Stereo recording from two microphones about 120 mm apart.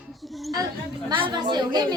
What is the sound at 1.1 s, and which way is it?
Chatter, 40° right (ahead or behind).